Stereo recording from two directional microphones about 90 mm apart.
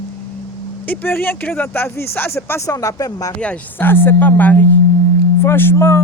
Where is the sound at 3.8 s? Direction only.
25° left (ahead or behind).